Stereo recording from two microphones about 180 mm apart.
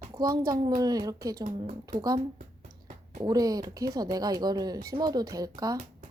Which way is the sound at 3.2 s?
20° right (ahead or behind).